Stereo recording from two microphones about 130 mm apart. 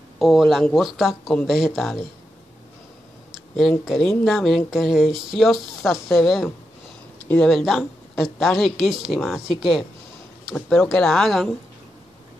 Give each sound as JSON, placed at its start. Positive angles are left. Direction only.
{"t": 0.2, "sound": "speech", "side_deg": 0}
{"t": 3.3, "sound": "a sound", "side_deg": 0}
{"t": 3.8, "sound": "speech", "side_deg": 0}